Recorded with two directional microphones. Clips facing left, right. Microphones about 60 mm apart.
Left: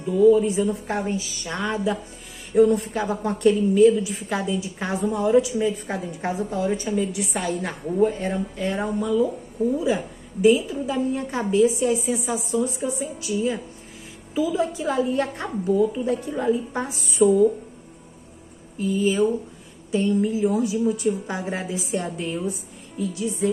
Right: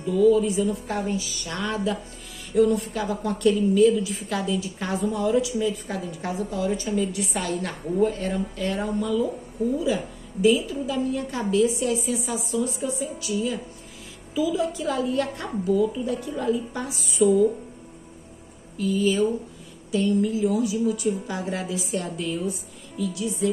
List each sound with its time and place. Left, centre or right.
0.0 s a woman's voice: left
1.6 s a woman's voice: centre
2.5 s a woman's voice: left
7.0 s a woman's voice: centre
10.4 s a woman's voice: left
18.8 s a woman's voice: left